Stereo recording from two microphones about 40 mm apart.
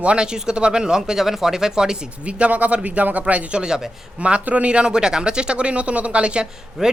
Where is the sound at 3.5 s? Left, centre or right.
Centre.